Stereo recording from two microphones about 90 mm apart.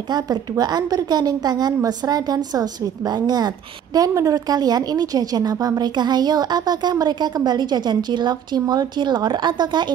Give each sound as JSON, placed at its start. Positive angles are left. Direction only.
{"t": 0.1, "sound": "a woman's voice", "side_deg": -50}